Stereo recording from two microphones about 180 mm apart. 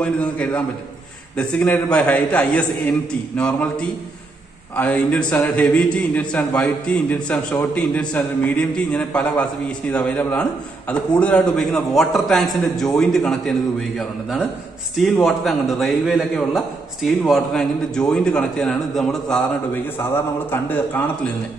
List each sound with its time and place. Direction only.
0.0 s a man's voice: 5° left (ahead or behind)